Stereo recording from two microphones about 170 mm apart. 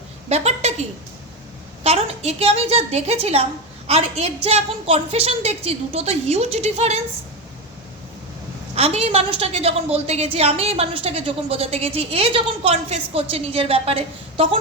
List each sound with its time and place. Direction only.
0.3 s a sound: 40° right (ahead or behind)
1.8 s a woman's voice: 35° right (ahead or behind)
8.7 s a woman's voice: 35° right (ahead or behind)